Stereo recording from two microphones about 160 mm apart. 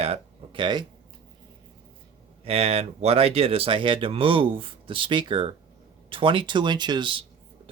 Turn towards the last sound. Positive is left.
turn(degrees=-30)  # may be behind; listen again after turning